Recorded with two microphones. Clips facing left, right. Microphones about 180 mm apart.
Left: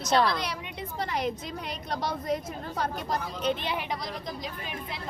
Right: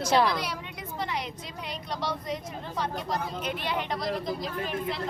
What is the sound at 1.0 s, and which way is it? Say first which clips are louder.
Speech: left 3 dB; 50° left (ahead or behind).